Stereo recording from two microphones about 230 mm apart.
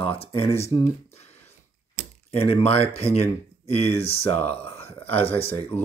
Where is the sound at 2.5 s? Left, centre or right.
Left.